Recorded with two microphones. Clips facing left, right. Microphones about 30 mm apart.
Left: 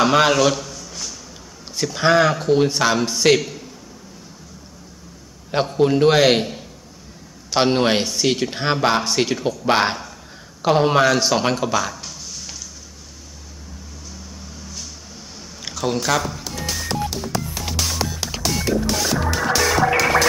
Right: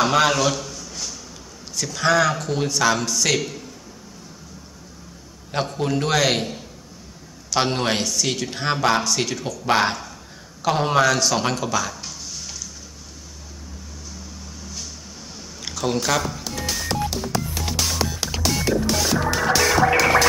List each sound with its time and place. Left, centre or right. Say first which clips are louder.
0.0 s a sound: left 3 dB; centre
1.8 s speech: left 3 dB; left
3.3 s a woman's voice: left 2 dB; centre
5.7 s a man's voice: left 8 dB; centre
11.3 s a man's voice: left 3 dB; centre
15.6 s music: left 1 dB; centre